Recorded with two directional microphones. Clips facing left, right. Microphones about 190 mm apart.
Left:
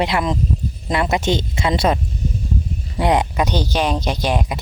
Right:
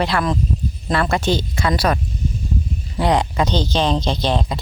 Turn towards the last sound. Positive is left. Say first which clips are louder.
# even
turn(degrees=15)  # may be behind; listen again after turning